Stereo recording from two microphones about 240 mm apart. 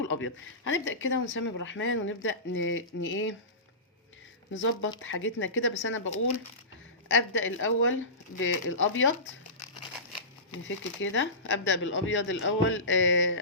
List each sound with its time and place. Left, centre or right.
0.1 s speech: left
4.5 s speech: left
7.1 s a woman's voice: left
10.7 s speech: left